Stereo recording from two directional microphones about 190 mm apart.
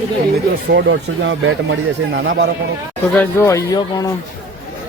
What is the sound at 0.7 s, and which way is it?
Speech, 65° right (ahead or behind).